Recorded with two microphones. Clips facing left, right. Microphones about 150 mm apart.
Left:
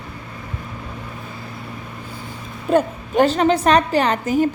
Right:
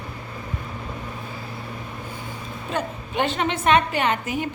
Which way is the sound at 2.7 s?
45° left (ahead or behind).